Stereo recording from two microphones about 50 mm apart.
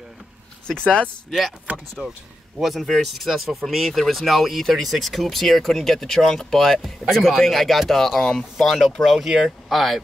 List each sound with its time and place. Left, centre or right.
0.7 s speech: centre
2.6 s speech: centre